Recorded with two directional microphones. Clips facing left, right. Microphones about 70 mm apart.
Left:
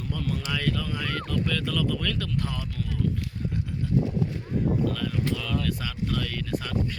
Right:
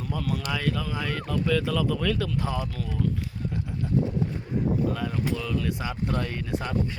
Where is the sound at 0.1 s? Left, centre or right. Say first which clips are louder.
Right 1 dB; centre.